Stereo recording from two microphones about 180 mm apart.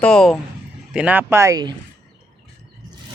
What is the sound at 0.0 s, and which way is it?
Speech, 5° left (ahead or behind).